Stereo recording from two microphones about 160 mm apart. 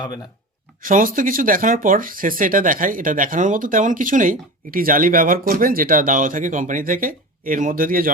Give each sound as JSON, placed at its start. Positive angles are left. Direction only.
{"t": 0.8, "sound": "speech", "side_deg": -60}